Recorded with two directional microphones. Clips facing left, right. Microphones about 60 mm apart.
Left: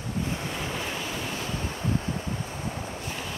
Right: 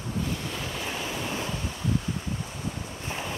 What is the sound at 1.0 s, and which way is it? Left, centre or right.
Waves, right.